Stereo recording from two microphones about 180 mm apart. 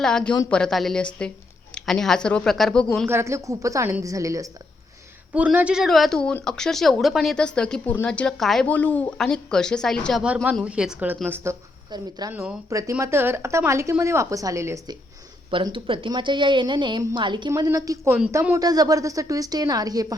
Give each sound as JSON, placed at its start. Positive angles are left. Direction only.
{"t": 0.0, "sound": "speech", "side_deg": 5}
{"t": 3.1, "sound": "a woman's voice", "side_deg": -15}
{"t": 5.3, "sound": "a woman's voice", "side_deg": -5}
{"t": 15.4, "sound": "a woman's voice", "side_deg": -30}